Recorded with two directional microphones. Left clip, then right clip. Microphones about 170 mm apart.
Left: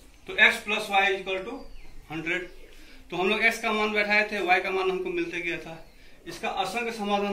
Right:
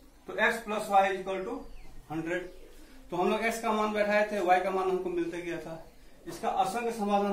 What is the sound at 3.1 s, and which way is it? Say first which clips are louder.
A man's voice: left 5 dB; 25° right (ahead or behind).